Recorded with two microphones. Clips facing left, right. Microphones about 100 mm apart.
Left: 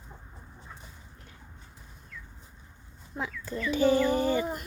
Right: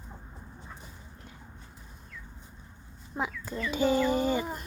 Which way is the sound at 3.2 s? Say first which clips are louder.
Even; 15° right (ahead or behind).